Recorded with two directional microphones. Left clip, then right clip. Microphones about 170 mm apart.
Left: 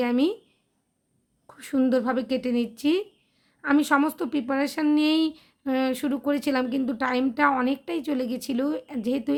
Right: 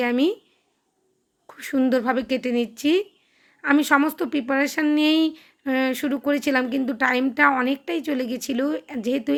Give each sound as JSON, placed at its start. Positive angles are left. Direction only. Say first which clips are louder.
{"t": 0.0, "sound": "a woman's voice", "louder": "right 3 dB", "side_deg": -15}
{"t": 1.5, "sound": "a woman's voice", "louder": "right 2 dB", "side_deg": -15}